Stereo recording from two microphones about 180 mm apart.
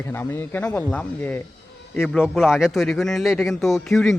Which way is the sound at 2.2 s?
5° right (ahead or behind).